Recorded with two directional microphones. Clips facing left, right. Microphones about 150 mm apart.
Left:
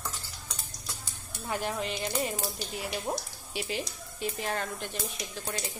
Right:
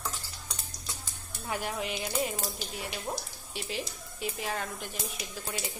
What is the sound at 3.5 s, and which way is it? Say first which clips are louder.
Speech: left 3 dB; centre (ahead or behind).